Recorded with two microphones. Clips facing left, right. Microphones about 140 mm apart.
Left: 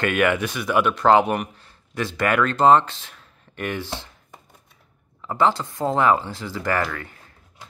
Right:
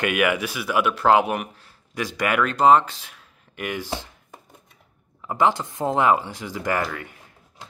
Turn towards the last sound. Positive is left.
turn(degrees=-15)  # may be behind; listen again after turning